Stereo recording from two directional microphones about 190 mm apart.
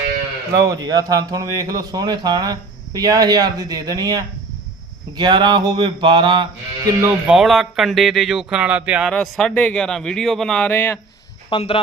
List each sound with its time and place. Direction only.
0.7 s speech: 20° right (ahead or behind)
7.0 s speech: 5° right (ahead or behind)
11.4 s a man's voice: 25° left (ahead or behind)